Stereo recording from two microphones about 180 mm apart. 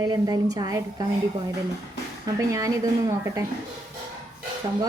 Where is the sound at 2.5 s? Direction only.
20° right (ahead or behind).